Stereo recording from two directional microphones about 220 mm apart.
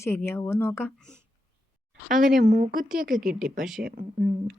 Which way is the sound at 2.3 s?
40° right (ahead or behind).